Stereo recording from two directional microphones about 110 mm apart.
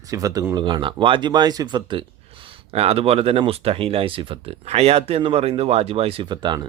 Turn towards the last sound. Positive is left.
turn(degrees=-40)  # may be behind; listen again after turning